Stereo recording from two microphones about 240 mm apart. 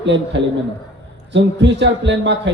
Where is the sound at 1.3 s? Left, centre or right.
Right.